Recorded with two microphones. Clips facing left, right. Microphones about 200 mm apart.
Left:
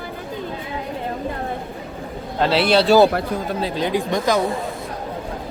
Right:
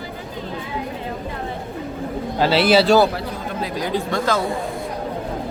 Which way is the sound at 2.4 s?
Centre (ahead or behind).